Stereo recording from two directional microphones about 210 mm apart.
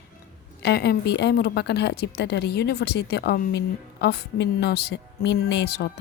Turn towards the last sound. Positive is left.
turn(degrees=50)  # may be behind; listen again after turning